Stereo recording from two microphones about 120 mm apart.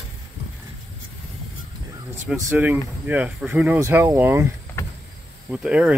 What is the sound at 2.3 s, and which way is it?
Speech, 15° right (ahead or behind).